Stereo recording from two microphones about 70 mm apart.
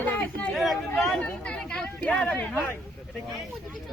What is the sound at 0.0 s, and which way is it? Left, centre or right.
Chatter, left.